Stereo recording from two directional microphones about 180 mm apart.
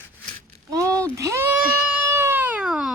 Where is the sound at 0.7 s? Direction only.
20° right (ahead or behind).